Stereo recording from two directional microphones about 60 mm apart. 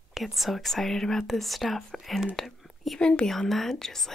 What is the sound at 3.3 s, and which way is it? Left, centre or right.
Speech, centre.